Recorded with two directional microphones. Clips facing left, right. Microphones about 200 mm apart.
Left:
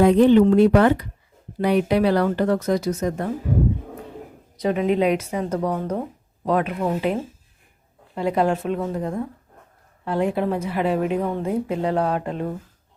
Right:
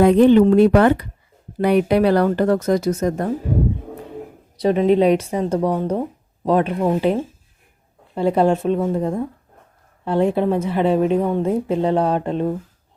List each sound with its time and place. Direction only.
0.0 s speech: 60° right (ahead or behind)
4.5 s a woman's voice: 30° right (ahead or behind)